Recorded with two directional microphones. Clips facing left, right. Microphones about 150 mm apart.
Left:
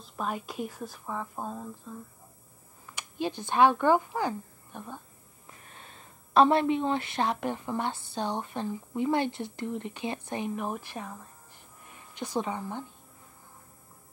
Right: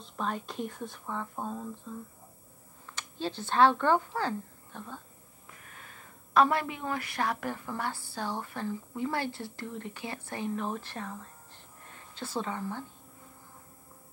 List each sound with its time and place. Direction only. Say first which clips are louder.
0.0 s speech: left 1 dB; 5° left (ahead or behind)
2.9 s speech: left 3 dB; 15° left (ahead or behind)
5.6 s a woman's voice: left 2 dB; 25° left (ahead or behind)